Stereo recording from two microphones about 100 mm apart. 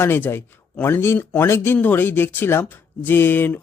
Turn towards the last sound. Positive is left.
turn(degrees=20)  # may be behind; listen again after turning